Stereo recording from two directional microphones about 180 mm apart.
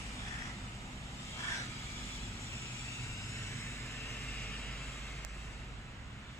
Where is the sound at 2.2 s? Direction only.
15° left (ahead or behind).